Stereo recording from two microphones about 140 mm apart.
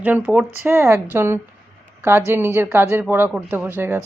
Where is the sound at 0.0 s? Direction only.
10° right (ahead or behind).